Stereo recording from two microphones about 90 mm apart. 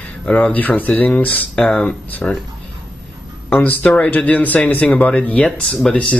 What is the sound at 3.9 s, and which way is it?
Speech, 15° left (ahead or behind).